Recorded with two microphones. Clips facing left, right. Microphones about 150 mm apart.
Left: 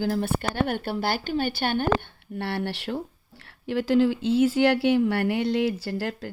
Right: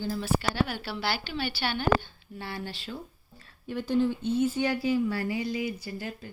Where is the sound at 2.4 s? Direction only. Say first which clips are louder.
Left 8 dB; 70° left (ahead or behind).